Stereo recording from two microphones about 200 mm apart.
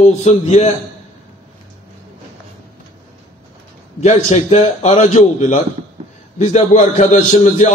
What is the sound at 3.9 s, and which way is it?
A man's voice, 35° left (ahead or behind).